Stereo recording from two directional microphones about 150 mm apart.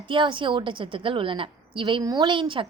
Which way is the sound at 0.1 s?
35° right (ahead or behind).